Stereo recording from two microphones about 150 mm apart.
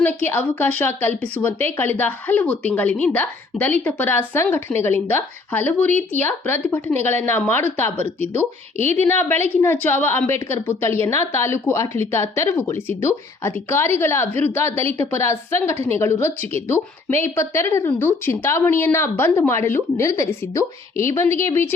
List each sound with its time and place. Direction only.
0.0 s a woman's voice: 10° left (ahead or behind)